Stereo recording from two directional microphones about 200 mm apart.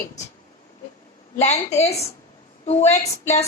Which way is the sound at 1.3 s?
35° left (ahead or behind).